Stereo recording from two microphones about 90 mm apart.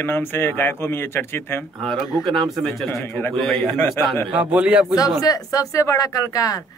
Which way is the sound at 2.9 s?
25° left (ahead or behind).